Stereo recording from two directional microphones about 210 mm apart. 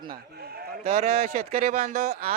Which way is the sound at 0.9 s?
30° right (ahead or behind).